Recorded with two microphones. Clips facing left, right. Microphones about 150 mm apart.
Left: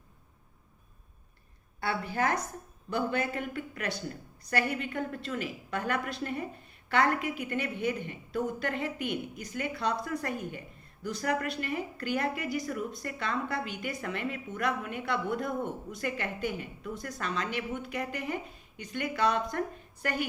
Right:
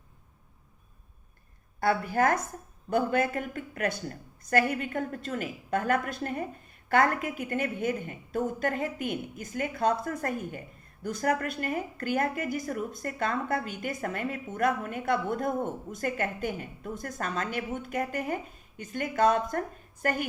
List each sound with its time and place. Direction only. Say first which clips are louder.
1.8 s a woman's voice: right 5 dB; 45° right (ahead or behind)